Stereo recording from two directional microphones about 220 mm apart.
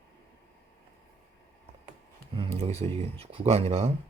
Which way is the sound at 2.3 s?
25° right (ahead or behind).